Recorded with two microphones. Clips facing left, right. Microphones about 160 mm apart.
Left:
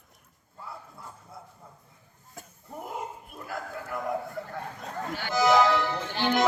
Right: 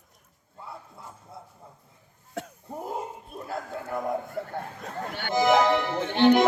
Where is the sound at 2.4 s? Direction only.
75° right (ahead or behind).